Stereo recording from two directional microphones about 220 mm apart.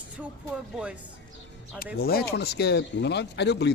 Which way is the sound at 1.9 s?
45° left (ahead or behind).